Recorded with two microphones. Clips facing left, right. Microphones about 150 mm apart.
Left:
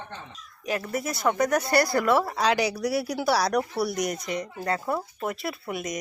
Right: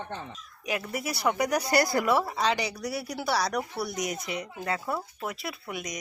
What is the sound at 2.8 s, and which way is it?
Speech, 90° left.